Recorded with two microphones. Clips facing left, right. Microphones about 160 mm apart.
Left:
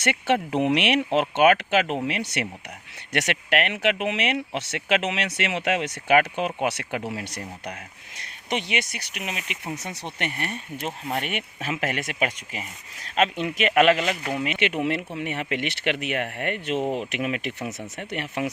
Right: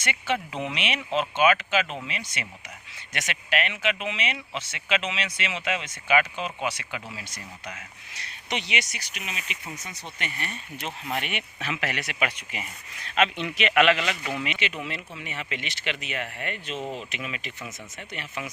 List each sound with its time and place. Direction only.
0.0 s speech: 65° left (ahead or behind)
8.1 s speech: 50° left (ahead or behind)
14.6 s speech: 55° left (ahead or behind)